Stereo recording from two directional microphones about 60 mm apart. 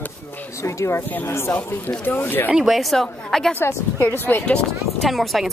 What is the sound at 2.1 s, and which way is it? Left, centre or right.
Speech, left.